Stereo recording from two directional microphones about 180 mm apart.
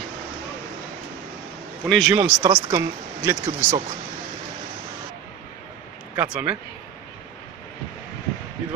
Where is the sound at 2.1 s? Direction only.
10° right (ahead or behind).